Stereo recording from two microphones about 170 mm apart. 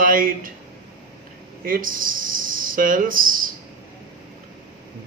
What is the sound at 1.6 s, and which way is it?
Speech, 55° right (ahead or behind).